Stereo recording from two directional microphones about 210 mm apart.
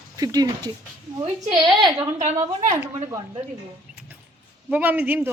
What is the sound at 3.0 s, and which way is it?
Speech, 15° right (ahead or behind).